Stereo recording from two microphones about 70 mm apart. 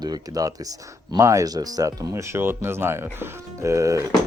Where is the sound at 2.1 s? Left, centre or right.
Right.